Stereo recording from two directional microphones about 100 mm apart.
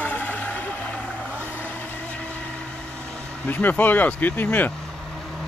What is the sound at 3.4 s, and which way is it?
Speech, 20° left (ahead or behind).